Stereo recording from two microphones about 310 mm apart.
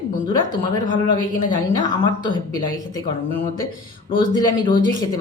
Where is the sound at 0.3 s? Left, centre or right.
Centre.